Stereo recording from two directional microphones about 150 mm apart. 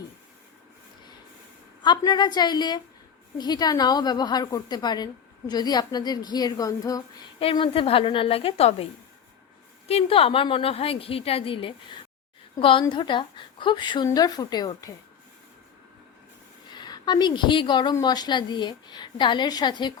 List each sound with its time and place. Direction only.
1.8 s a woman's voice: 30° left (ahead or behind)
7.3 s a woman's voice: 35° left (ahead or behind)
9.9 s a woman's voice: 40° left (ahead or behind)
16.7 s a woman's voice: 30° left (ahead or behind)